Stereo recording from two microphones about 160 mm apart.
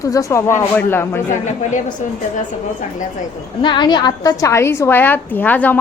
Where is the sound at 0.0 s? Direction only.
20° left (ahead or behind).